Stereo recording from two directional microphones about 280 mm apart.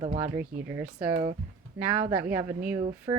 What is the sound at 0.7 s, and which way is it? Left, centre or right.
Speech, centre.